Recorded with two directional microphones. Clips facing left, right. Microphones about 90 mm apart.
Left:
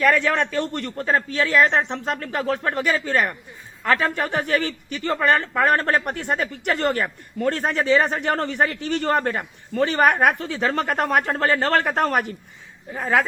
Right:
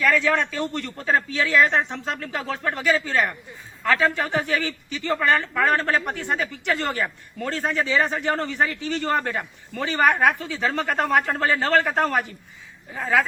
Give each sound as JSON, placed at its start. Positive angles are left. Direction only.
{"t": 0.0, "sound": "a man's voice", "side_deg": 50}